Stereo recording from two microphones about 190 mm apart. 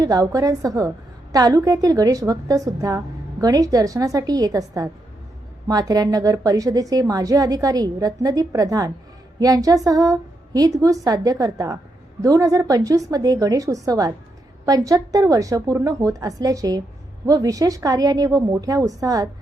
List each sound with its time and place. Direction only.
0.0 s a woman's voice: 20° right (ahead or behind)